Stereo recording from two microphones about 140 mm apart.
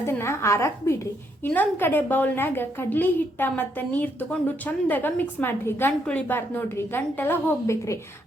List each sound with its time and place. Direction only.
0.0 s a woman's voice: 20° left (ahead or behind)